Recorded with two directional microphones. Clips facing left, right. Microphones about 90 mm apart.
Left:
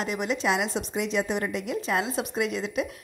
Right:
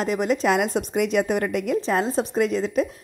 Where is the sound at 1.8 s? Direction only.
35° right (ahead or behind).